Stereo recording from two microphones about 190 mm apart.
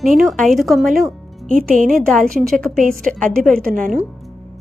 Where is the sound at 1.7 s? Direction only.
45° right (ahead or behind).